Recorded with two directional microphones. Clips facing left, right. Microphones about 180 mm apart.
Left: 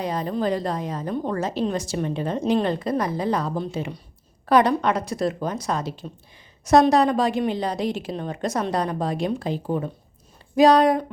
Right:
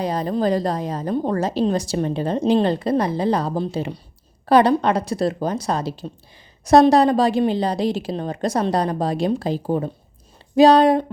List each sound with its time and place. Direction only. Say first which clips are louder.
0.0 s a woman's voice: right 4 dB; 35° right (ahead or behind)